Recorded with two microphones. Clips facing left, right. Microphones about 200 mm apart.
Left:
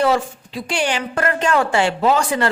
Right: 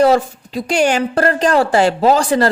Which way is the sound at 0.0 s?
40° right (ahead or behind).